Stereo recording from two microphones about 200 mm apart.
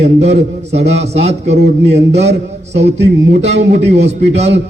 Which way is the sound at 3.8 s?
30° right (ahead or behind).